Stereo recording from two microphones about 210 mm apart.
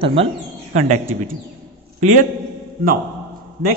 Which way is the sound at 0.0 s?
25° right (ahead or behind).